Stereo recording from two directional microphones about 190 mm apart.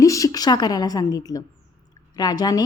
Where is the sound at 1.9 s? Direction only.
20° left (ahead or behind).